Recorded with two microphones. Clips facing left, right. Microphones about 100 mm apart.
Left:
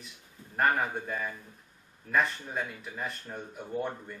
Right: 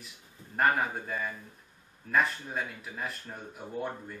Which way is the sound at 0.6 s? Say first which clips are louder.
Even; centre (ahead or behind).